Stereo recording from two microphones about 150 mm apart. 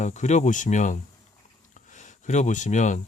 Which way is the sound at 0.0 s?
50° left (ahead or behind).